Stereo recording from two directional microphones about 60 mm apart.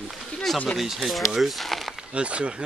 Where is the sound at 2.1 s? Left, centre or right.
Centre.